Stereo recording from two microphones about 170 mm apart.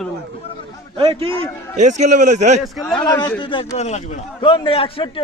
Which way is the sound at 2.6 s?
Centre (ahead or behind).